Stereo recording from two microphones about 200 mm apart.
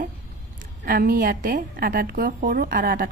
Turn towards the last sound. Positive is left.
turn(degrees=-45)  # may be behind; listen again after turning